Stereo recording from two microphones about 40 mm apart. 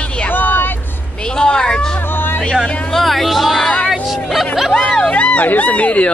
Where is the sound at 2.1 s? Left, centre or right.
Left.